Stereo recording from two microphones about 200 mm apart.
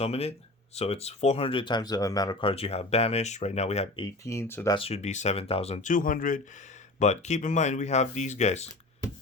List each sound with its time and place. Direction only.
0.0 s speech: 30° left (ahead or behind)
4.0 s speech: 15° left (ahead or behind)
4.8 s speech: 30° left (ahead or behind)